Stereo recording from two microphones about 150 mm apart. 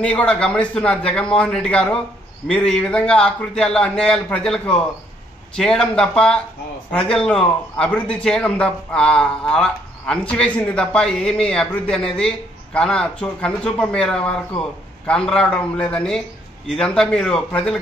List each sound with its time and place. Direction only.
0.0 s a man's voice: 10° left (ahead or behind)